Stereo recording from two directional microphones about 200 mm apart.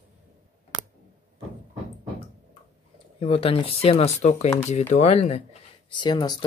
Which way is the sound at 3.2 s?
30° left (ahead or behind).